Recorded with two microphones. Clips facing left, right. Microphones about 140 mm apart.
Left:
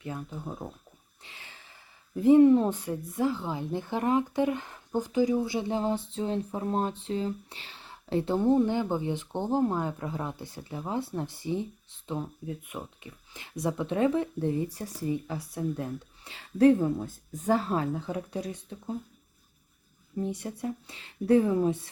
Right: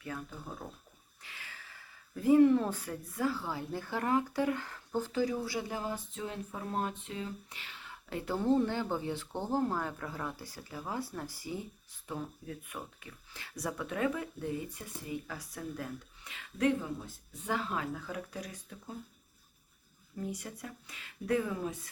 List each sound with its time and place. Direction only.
0.0 s speech: 20° left (ahead or behind)
17.1 s speech: 45° left (ahead or behind); by 18.9 s 25° left (ahead or behind)
20.1 s speech: 25° left (ahead or behind)